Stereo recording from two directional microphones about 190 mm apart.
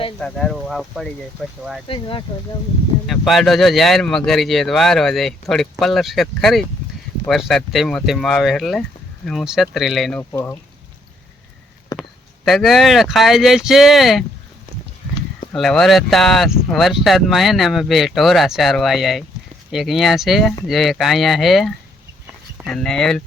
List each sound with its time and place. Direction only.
0.2 s speech: 5° left (ahead or behind)
1.9 s speech: 25° left (ahead or behind)
3.1 s speech: centre (ahead or behind)
11.9 s a sound: 20° left (ahead or behind)
12.5 s speech: centre (ahead or behind)
15.5 s speech: centre (ahead or behind)